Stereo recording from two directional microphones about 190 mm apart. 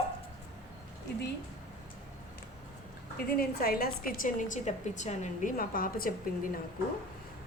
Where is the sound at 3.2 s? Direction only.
50° left (ahead or behind).